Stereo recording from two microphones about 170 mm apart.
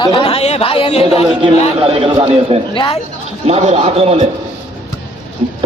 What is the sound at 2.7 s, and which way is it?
Speech, 30° left (ahead or behind).